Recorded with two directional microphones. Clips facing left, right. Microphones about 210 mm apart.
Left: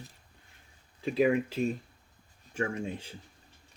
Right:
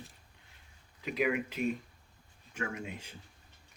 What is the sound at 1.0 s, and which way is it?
Speech, 30° left (ahead or behind).